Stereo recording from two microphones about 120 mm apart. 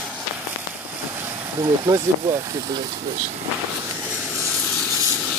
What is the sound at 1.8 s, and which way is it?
Speech, 35° right (ahead or behind).